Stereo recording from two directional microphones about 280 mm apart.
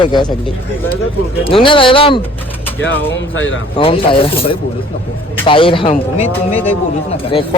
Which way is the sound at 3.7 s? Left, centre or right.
Centre.